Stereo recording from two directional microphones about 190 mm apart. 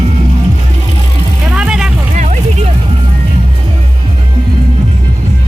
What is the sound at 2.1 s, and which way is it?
Vehicle, 40° right (ahead or behind).